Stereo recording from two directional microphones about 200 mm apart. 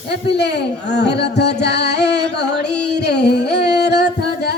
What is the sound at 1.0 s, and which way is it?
Music, 55° left (ahead or behind).